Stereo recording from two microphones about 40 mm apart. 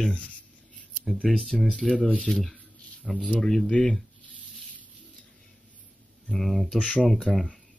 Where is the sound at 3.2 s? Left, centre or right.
Left.